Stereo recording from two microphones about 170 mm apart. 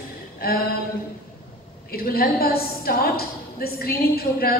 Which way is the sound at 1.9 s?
65° left (ahead or behind).